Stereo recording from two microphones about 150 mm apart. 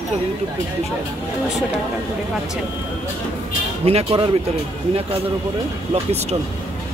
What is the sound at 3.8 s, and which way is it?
Speech, 40° right (ahead or behind).